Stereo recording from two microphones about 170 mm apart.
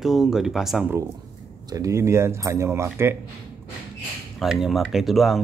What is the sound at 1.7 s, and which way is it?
Speech, 20° right (ahead or behind).